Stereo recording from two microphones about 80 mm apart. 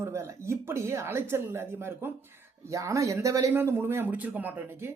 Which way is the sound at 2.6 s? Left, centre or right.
Right.